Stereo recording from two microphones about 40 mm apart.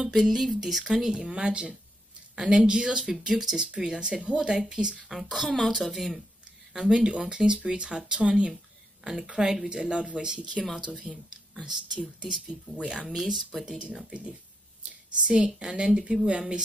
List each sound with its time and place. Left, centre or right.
0.1 s speech: centre
5.0 s speech: centre
6.7 s speech: centre
9.7 s speech: right
13.1 s speech: centre
13.7 s speech: right
14.9 s a sound: right
15.3 s speech: centre